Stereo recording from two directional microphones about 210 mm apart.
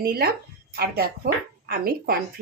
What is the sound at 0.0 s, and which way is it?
Speech, 45° right (ahead or behind).